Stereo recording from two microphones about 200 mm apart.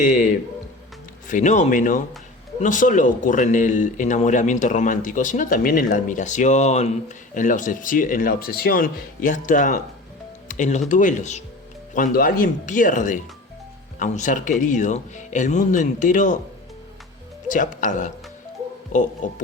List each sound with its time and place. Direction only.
1.3 s speech: 35° left (ahead or behind)
17.5 s speech: 40° left (ahead or behind)
19.2 s speech: 40° left (ahead or behind)